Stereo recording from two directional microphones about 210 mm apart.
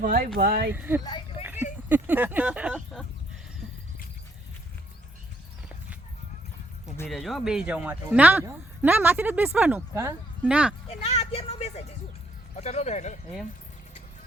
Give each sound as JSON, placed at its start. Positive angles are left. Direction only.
{"t": 0.0, "sound": "speech", "side_deg": -40}
{"t": 0.7, "sound": "a man's voice", "side_deg": -10}
{"t": 1.4, "sound": "a sound", "side_deg": -10}
{"t": 1.9, "sound": "speech", "side_deg": -10}
{"t": 7.1, "sound": "a man's voice", "side_deg": 0}
{"t": 10.8, "sound": "speech", "side_deg": 30}